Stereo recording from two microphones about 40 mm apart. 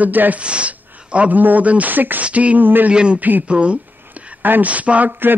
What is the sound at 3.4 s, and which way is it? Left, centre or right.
Speech, right.